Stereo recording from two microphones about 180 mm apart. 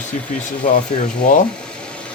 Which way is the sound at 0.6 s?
45° left (ahead or behind).